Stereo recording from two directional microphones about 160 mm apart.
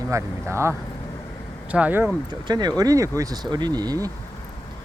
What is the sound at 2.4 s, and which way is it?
Speech, 25° right (ahead or behind).